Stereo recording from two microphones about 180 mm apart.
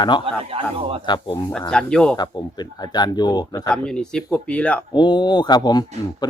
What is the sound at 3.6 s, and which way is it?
Speech, 5° left (ahead or behind).